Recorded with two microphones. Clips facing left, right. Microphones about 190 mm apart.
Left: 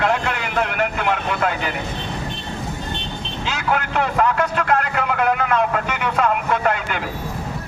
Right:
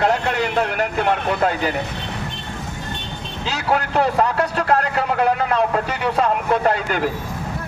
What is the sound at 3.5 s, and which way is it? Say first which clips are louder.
A man's voice: right 2 dB; 35° right (ahead or behind).